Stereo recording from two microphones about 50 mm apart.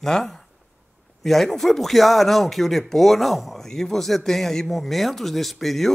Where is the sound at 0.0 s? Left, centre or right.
Centre.